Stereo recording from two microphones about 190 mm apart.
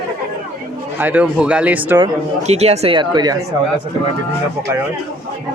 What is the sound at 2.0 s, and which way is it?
Speech, 35° right (ahead or behind).